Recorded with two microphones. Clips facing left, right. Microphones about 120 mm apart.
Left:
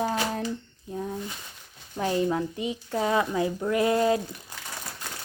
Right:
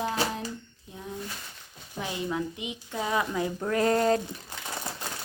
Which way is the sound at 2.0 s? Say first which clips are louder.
Left 6 dB; 40° left (ahead or behind).